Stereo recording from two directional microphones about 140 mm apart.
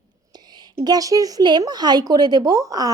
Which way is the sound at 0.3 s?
30° right (ahead or behind).